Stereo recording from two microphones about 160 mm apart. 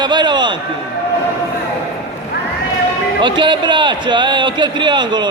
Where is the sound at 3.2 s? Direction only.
30° right (ahead or behind).